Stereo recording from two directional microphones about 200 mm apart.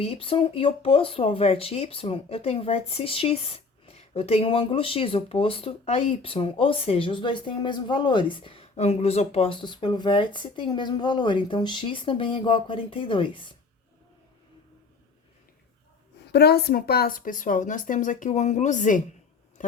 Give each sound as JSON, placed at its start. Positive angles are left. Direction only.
{"t": 0.0, "sound": "speech", "side_deg": 30}
{"t": 16.3, "sound": "a woman's voice", "side_deg": 55}